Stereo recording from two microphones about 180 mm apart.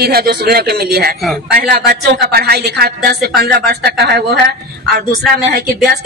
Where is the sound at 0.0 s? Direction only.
60° right (ahead or behind).